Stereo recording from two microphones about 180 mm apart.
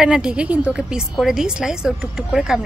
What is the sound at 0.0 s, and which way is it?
A woman's voice, 5° right (ahead or behind).